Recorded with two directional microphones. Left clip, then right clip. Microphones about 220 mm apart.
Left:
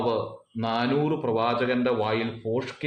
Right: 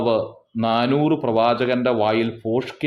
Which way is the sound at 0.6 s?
45° right (ahead or behind).